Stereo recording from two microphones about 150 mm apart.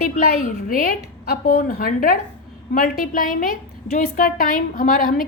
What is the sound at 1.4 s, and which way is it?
A woman's voice, 85° left.